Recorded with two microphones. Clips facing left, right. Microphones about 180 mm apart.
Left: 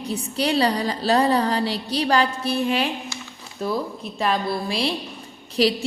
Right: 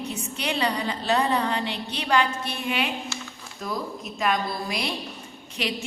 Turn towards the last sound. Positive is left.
turn(degrees=35)  # may be behind; listen again after turning